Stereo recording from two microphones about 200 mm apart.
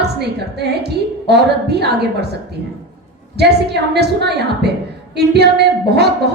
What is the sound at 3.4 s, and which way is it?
A woman's voice, 55° right (ahead or behind).